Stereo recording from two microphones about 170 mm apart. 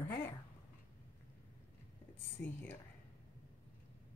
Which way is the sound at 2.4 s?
10° left (ahead or behind).